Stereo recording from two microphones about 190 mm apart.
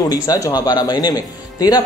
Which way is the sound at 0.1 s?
20° left (ahead or behind).